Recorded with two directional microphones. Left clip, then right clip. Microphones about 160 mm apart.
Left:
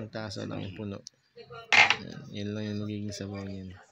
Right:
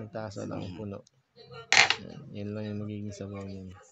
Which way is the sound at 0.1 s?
Centre (ahead or behind).